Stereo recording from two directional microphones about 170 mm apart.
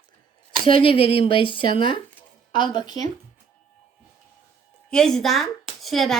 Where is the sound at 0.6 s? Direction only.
30° left (ahead or behind).